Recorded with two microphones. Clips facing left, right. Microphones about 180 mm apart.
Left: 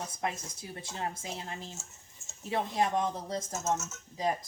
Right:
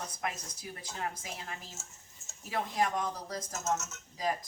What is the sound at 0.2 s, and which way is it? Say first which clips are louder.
Speech: left 3 dB; 25° left (ahead or behind).